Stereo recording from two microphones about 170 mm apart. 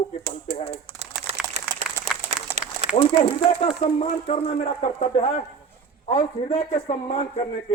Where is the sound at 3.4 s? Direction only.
40° left (ahead or behind).